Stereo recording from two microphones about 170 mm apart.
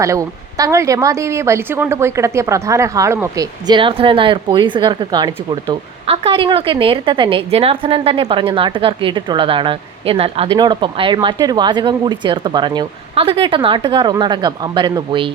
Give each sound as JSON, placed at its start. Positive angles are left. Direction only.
{"t": 0.0, "sound": "speech", "side_deg": -20}